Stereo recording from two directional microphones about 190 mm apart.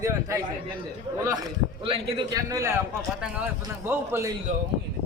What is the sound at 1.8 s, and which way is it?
A man's voice, 30° right (ahead or behind).